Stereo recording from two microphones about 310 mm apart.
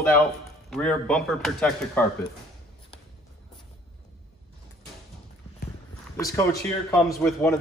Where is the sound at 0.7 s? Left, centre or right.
Centre.